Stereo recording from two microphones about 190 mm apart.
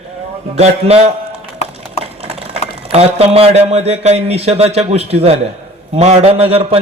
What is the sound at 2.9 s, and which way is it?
A man's voice, 35° right (ahead or behind).